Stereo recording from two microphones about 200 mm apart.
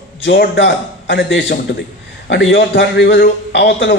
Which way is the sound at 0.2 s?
65° left (ahead or behind).